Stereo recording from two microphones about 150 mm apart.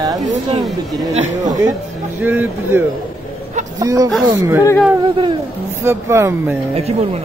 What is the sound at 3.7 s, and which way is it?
Speech, 25° right (ahead or behind).